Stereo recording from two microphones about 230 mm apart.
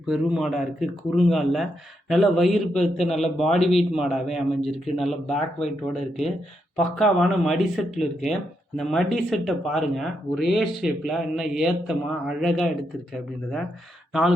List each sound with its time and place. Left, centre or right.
0.0 s speech: centre
14.1 s speech: centre